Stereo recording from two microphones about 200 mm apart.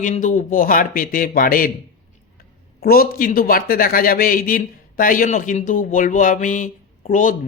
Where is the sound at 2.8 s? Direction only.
45° left (ahead or behind).